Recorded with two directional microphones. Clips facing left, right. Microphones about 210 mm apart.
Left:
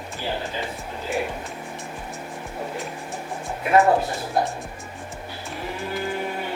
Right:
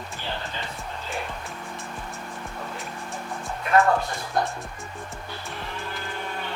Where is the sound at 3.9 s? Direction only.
30° left (ahead or behind).